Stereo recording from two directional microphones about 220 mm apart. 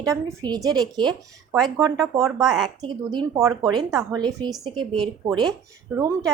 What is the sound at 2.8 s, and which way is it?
A woman's voice, 20° right (ahead or behind).